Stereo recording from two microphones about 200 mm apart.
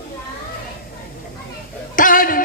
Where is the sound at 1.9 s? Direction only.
45° left (ahead or behind).